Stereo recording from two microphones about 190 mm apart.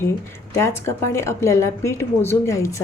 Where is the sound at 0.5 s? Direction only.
15° left (ahead or behind).